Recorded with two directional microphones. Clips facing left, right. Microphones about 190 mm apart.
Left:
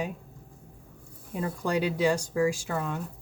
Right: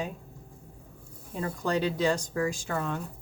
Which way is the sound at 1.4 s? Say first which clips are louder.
Left 1 dB; 10° left (ahead or behind).